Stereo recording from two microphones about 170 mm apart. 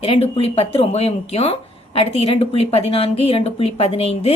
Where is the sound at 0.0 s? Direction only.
35° left (ahead or behind).